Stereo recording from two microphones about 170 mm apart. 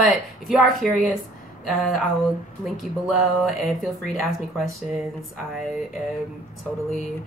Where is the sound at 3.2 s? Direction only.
Centre (ahead or behind).